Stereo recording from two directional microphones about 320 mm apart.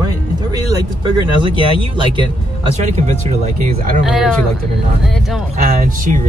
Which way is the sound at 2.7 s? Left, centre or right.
Right.